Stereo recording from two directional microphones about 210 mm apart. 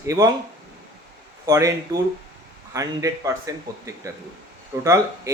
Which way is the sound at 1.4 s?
15° right (ahead or behind).